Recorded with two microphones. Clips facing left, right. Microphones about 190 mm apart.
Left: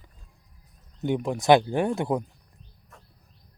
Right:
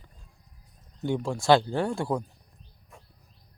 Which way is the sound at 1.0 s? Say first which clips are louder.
Left 2 dB; 20° left (ahead or behind).